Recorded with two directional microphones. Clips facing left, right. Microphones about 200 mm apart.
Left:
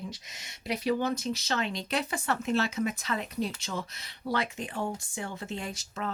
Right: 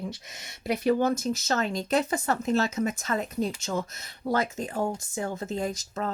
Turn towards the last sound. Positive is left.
turn(degrees=-40)  # may be behind; listen again after turning